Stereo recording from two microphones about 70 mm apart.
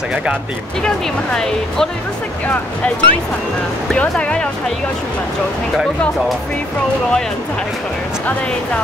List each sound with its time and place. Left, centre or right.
0.8 s speech: centre
2.4 s speech: left